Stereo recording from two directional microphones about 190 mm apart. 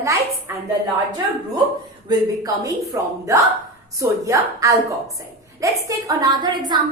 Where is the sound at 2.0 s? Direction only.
20° right (ahead or behind).